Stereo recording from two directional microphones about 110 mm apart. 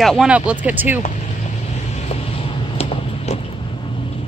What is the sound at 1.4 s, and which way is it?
Vehicle, 90° left.